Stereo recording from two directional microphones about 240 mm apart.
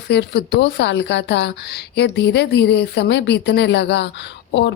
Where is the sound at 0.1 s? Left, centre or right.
Left.